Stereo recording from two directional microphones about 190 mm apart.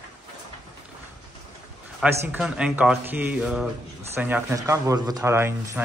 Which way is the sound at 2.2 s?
5° right (ahead or behind).